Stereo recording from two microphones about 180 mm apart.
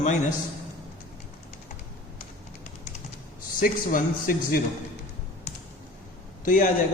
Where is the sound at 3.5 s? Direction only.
50° left (ahead or behind).